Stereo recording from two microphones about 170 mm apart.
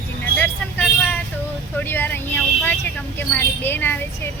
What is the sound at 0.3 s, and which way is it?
Vehicle, 10° left (ahead or behind).